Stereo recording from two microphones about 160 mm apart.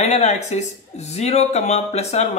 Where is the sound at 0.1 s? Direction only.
45° left (ahead or behind).